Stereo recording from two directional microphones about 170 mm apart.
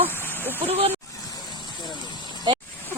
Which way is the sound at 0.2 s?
10° left (ahead or behind).